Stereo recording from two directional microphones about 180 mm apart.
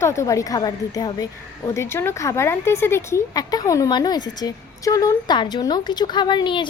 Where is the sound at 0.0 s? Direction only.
15° left (ahead or behind).